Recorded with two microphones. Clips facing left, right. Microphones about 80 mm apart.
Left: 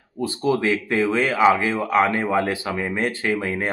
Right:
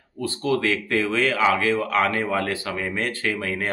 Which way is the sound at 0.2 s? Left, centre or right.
Centre.